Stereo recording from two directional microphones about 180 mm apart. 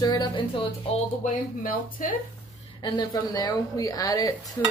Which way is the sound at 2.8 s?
20° left (ahead or behind).